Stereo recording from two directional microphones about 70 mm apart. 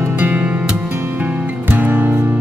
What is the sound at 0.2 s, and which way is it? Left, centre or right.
Music, right.